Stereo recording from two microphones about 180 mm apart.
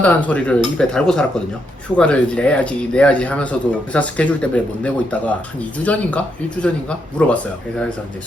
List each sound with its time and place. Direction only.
0.0 s speech: 10° left (ahead or behind)